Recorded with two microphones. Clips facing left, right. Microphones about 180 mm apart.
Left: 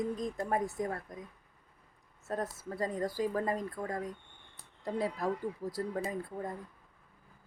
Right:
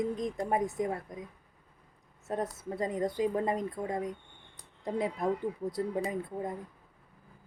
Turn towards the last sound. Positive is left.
turn(degrees=-20)  # may be behind; listen again after turning